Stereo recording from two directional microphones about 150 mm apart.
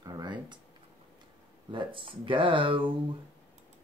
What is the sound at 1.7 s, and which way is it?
Speech, 35° right (ahead or behind).